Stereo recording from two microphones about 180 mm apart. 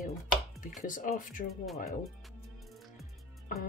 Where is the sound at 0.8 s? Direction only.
45° left (ahead or behind).